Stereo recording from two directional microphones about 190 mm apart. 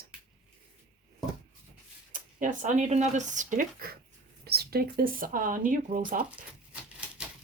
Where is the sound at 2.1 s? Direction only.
45° right (ahead or behind).